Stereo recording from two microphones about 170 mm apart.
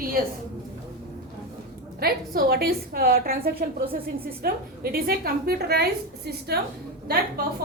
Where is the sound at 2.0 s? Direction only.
65° right (ahead or behind).